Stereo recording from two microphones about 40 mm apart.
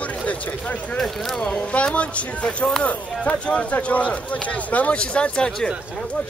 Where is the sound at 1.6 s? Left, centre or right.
Left.